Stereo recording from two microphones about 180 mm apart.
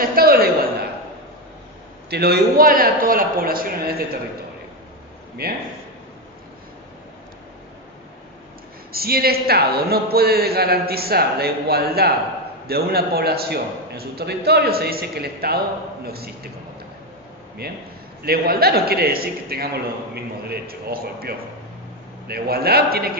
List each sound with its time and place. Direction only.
0.0 s a sound: 55° right (ahead or behind)
2.0 s a man's voice: 65° right (ahead or behind)
5.4 s a man's voice: 60° right (ahead or behind)
8.9 s a man's voice: 55° right (ahead or behind)
17.6 s a man's voice: 60° right (ahead or behind)